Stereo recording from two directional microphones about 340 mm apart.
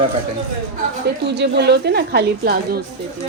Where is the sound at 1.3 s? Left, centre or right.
Right.